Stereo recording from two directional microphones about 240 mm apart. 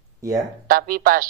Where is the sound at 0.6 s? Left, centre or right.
Right.